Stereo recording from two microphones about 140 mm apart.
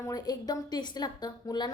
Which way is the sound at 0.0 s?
25° left (ahead or behind).